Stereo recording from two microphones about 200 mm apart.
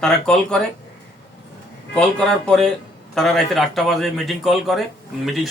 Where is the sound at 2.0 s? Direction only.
5° left (ahead or behind).